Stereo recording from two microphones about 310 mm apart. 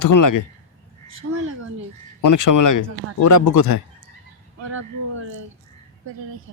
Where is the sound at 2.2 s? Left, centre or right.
Left.